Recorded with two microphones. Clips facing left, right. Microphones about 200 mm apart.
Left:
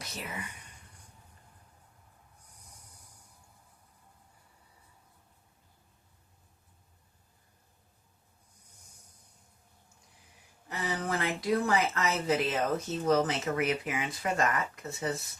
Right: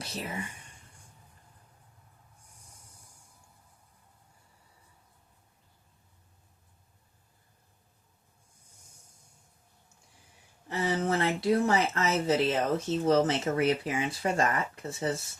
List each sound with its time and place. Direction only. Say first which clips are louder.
0.0 s speech: right 4 dB; 30° right (ahead or behind)
10.7 s speech: right 5 dB; 30° right (ahead or behind)